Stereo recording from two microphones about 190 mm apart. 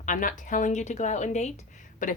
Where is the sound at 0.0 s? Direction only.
45° left (ahead or behind).